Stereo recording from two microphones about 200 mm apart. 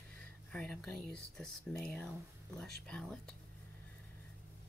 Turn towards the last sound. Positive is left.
turn(degrees=5)  # may be behind; listen again after turning